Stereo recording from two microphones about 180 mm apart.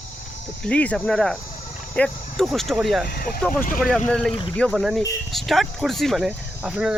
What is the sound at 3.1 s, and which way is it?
Speech, 55° left (ahead or behind).